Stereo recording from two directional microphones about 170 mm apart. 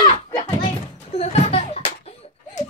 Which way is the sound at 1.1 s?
40° left (ahead or behind).